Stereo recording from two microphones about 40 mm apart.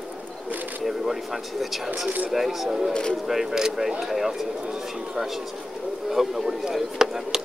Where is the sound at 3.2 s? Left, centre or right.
Centre.